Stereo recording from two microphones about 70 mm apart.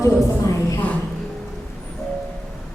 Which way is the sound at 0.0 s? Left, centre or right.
Left.